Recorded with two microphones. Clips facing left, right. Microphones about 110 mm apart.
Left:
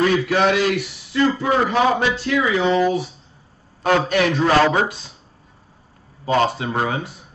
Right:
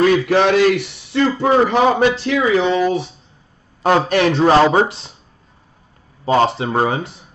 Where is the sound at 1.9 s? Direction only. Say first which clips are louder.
Right 4 dB; 50° right (ahead or behind).